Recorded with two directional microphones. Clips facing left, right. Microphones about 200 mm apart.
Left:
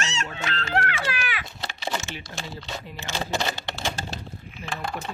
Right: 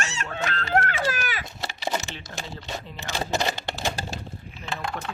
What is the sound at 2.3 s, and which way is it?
Speech, 10° left (ahead or behind).